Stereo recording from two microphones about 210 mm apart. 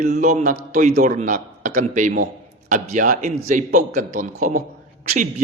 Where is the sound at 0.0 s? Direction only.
35° right (ahead or behind).